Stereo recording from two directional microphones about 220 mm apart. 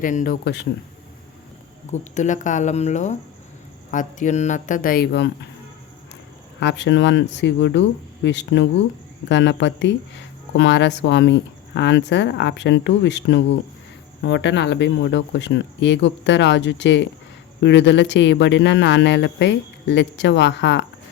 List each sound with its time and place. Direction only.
0.0 s speech: 35° left (ahead or behind)
0.4 s speech: 50° left (ahead or behind)
1.9 s speech: 35° left (ahead or behind); by 5.3 s 50° left (ahead or behind)
6.6 s speech: 55° left (ahead or behind)